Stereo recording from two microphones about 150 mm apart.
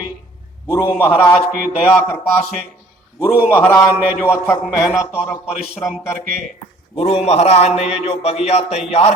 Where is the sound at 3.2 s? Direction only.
15° left (ahead or behind).